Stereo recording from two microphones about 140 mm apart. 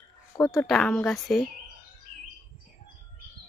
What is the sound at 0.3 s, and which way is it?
Speech, 30° left (ahead or behind).